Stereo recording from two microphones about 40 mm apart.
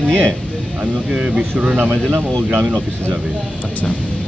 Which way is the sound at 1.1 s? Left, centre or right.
Right.